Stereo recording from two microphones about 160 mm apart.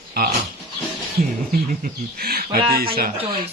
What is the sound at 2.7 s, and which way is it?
Speech, 70° right (ahead or behind).